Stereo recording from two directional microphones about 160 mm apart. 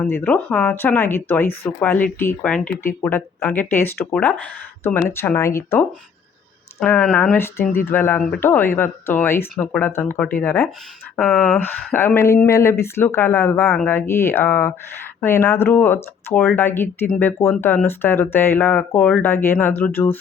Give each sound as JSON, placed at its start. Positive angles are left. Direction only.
{"t": 0.0, "sound": "speech", "side_deg": 10}
{"t": 6.8, "sound": "speech", "side_deg": 10}
{"t": 11.2, "sound": "speech", "side_deg": 0}